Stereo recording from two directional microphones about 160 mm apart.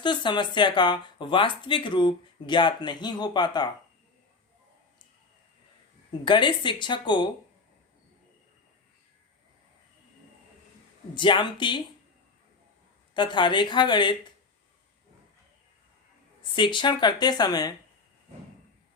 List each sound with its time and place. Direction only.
0.0 s speech: 30° left (ahead or behind)
6.2 s speech: 30° left (ahead or behind)
11.1 s speech: 30° left (ahead or behind)
13.1 s speech: 30° left (ahead or behind)
16.6 s speech: 30° left (ahead or behind)